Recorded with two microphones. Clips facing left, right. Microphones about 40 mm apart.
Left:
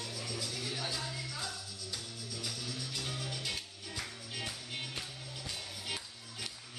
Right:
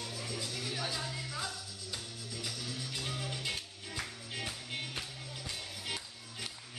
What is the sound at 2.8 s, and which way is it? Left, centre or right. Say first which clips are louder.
Music: right 2 dB; centre.